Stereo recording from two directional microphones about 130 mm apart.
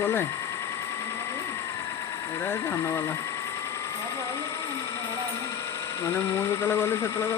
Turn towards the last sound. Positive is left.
turn(degrees=20)  # may be behind; listen again after turning